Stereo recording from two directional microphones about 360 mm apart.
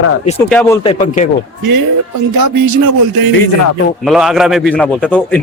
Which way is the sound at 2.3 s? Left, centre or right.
Right.